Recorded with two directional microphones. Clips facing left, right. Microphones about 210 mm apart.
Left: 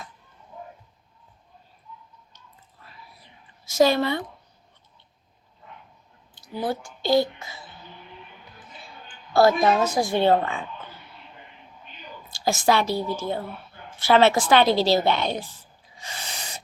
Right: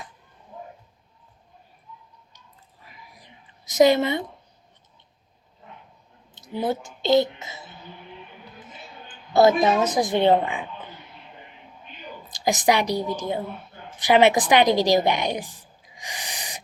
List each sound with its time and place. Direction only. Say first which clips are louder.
2.8 s whispering: even; 15° right (ahead or behind)
3.7 s a woman's voice: right 2 dB; 20° right (ahead or behind)
6.3 s a woman's voice: right 2 dB; 20° right (ahead or behind)
12.3 s a woman's voice: right 1 dB; 15° right (ahead or behind)